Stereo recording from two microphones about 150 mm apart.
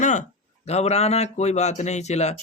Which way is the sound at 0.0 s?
55° left (ahead or behind).